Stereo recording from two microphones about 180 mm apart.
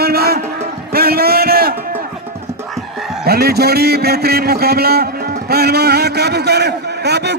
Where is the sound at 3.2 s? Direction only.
60° right (ahead or behind).